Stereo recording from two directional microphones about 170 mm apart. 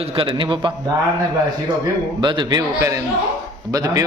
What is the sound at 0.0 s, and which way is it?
Speech, 30° right (ahead or behind).